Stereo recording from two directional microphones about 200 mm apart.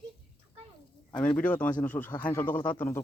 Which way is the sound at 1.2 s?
5° left (ahead or behind).